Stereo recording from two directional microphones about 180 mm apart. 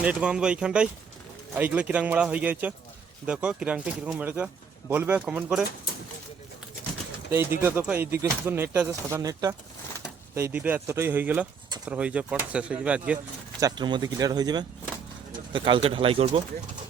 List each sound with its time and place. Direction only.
0.0 s speech: 5° right (ahead or behind)
7.3 s speech: 15° right (ahead or behind)
13.6 s speech: 20° right (ahead or behind)